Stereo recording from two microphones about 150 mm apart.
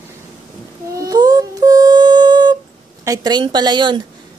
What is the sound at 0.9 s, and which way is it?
Humming, 25° right (ahead or behind).